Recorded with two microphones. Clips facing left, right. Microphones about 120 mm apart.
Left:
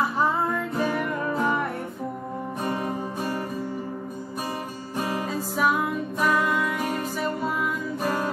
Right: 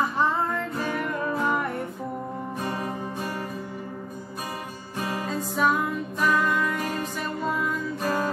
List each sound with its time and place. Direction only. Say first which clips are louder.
0.7 s music: left 2 dB; 10° left (ahead or behind)
5.6 s music: even; 5° left (ahead or behind)